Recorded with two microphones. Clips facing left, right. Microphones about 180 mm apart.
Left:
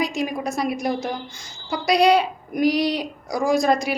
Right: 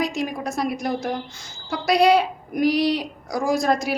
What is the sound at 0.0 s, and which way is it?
A woman's voice, centre (ahead or behind).